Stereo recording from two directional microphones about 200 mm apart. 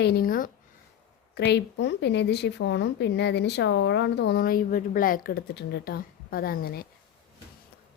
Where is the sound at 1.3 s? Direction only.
55° left (ahead or behind).